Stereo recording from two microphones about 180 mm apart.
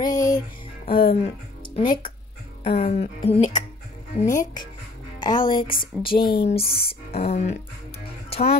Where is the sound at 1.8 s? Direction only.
30° left (ahead or behind).